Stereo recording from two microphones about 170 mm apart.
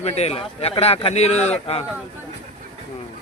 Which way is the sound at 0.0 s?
35° left (ahead or behind).